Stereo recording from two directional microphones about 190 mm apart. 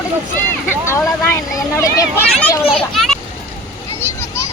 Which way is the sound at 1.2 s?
15° left (ahead or behind).